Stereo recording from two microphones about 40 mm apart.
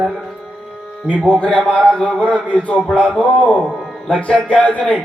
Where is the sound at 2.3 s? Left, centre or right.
Left.